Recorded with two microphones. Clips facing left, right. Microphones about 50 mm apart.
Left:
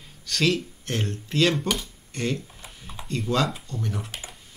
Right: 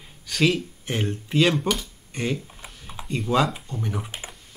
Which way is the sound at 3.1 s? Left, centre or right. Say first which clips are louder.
Right 3 dB; centre.